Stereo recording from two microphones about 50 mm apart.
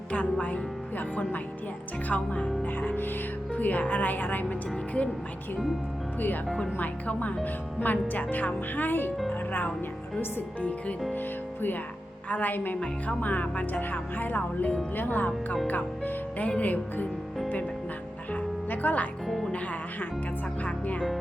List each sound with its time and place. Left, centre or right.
0.1 s speech: left
6.1 s speech: left
12.3 s speech: left
18.3 s music: left
20.7 s music: left